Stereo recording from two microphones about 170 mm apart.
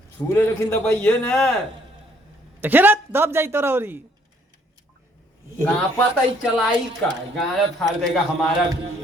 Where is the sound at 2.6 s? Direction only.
10° right (ahead or behind).